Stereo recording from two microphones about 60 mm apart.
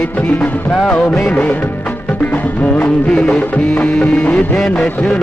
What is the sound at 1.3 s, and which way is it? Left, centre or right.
Music, left.